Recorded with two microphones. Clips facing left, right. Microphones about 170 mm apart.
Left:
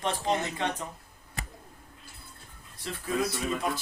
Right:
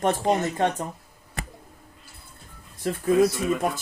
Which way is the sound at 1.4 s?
65° right (ahead or behind).